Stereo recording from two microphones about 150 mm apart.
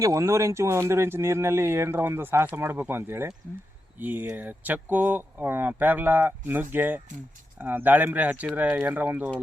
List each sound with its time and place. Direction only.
0.0 s speech: 20° right (ahead or behind)